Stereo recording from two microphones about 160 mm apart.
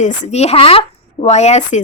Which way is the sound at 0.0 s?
45° left (ahead or behind).